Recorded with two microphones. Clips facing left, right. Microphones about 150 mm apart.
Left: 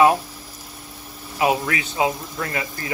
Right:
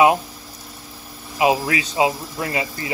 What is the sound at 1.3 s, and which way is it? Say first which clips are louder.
Speech: right 2 dB; 15° right (ahead or behind).